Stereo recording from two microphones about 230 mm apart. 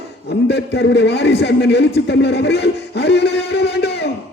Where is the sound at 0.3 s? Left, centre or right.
Left.